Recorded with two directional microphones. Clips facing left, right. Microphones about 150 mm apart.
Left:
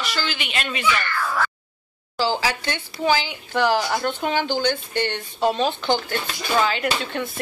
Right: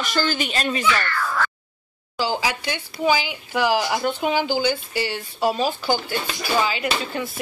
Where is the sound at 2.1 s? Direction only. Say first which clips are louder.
Left 1 dB; 15° right (ahead or behind).